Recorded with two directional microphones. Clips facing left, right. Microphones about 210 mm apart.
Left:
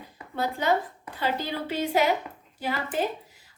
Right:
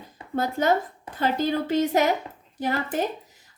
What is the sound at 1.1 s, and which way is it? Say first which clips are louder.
A woman's voice: right 6 dB; 45° right (ahead or behind).